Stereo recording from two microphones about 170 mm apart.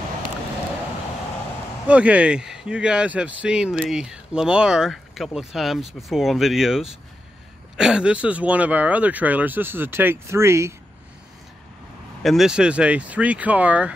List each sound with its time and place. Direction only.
1.9 s speech: 5° right (ahead or behind)
12.2 s speech: centre (ahead or behind)